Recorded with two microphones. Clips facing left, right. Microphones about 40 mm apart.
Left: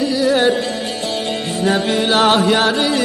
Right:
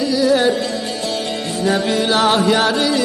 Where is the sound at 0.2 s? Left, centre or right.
Left.